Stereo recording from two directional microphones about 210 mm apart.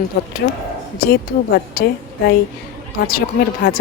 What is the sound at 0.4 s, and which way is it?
Speech, 50° left (ahead or behind).